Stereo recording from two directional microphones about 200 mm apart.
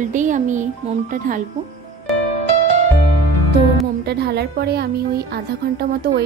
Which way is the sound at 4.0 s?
55° right (ahead or behind).